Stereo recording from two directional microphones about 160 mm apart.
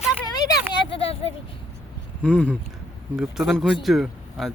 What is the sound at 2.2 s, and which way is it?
Speech, 5° left (ahead or behind).